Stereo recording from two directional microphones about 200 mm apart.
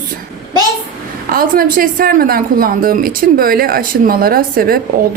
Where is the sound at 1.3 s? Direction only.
45° right (ahead or behind).